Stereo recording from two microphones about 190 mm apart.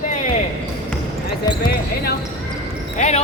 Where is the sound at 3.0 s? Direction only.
35° left (ahead or behind).